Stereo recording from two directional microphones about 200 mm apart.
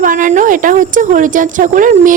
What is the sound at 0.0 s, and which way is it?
A woman's voice, 40° right (ahead or behind).